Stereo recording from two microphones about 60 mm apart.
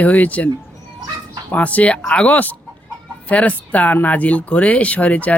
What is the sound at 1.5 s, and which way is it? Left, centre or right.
Speech, left.